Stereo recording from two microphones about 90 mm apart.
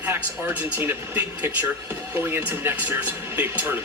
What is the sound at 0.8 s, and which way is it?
Speech, 25° right (ahead or behind).